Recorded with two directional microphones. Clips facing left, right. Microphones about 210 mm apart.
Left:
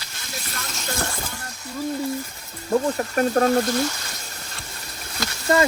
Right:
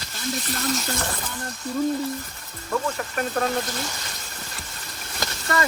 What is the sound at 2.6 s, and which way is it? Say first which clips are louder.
Speech: left 5 dB; 30° left (ahead or behind).